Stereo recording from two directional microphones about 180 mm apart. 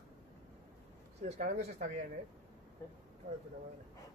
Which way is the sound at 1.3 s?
50° right (ahead or behind).